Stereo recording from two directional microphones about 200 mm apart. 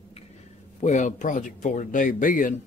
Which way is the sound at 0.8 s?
40° left (ahead or behind).